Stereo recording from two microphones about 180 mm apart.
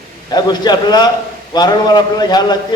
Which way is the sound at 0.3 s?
20° left (ahead or behind).